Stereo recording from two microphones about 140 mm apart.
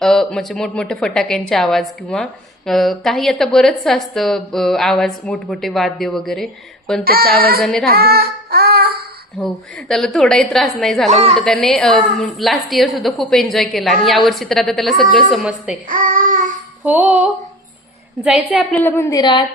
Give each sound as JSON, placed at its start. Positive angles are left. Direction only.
{"t": 0.0, "sound": "a woman's voice", "side_deg": 5}
{"t": 7.0, "sound": "child singing", "side_deg": -90}
{"t": 7.6, "sound": "a woman's voice", "side_deg": 5}
{"t": 7.9, "sound": "child singing", "side_deg": -90}
{"t": 9.9, "sound": "a woman's voice", "side_deg": 0}
{"t": 11.1, "sound": "a woman's voice", "side_deg": -50}
{"t": 11.3, "sound": "a woman's voice", "side_deg": 5}
{"t": 15.9, "sound": "child singing", "side_deg": -75}
{"t": 16.8, "sound": "a woman's voice", "side_deg": -10}
{"t": 18.7, "sound": "a woman's voice", "side_deg": 15}
{"t": 19.2, "sound": "a woman's voice", "side_deg": 30}